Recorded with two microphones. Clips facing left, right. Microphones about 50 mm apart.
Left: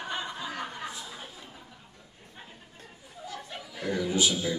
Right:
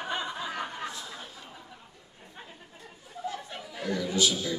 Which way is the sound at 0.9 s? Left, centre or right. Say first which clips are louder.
Right 1 dB; centre.